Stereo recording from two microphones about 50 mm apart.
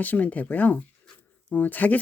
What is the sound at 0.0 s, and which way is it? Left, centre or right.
Speech, left.